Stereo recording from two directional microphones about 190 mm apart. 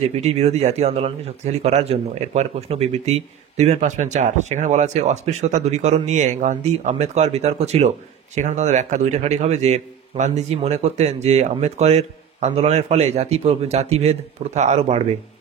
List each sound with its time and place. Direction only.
0.1 s a man's voice: 35° right (ahead or behind)